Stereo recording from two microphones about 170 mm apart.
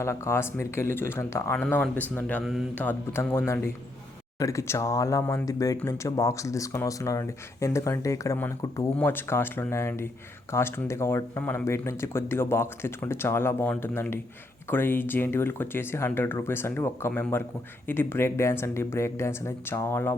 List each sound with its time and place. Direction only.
0.0 s speech: 15° left (ahead or behind)
2.4 s mantra: centre (ahead or behind)
2.7 s speech: 10° left (ahead or behind)